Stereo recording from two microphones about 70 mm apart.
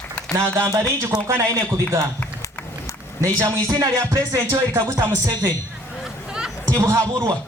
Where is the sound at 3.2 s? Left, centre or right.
Right.